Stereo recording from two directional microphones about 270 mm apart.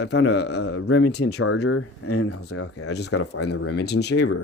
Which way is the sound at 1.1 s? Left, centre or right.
Left.